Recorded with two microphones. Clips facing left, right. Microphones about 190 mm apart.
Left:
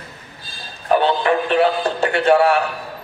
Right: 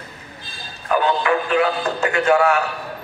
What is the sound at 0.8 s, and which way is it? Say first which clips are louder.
Speech: left 2 dB; 35° left (ahead or behind).